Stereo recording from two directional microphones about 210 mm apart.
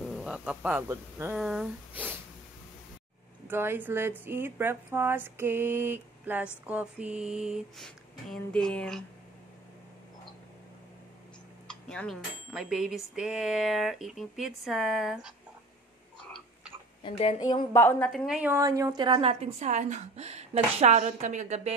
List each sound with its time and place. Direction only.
0.0 s speech: centre (ahead or behind)
3.4 s speech: 10° right (ahead or behind)
11.9 s speech: 5° left (ahead or behind)
16.2 s a sound: 5° left (ahead or behind)
17.0 s a woman's voice: 25° left (ahead or behind)
17.7 s a woman's voice: 10° left (ahead or behind); by 21.7 s 30° right (ahead or behind)